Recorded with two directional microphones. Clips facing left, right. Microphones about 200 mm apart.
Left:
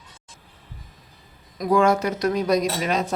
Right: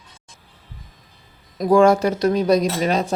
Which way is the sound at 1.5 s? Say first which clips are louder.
Right 5 dB; 30° right (ahead or behind).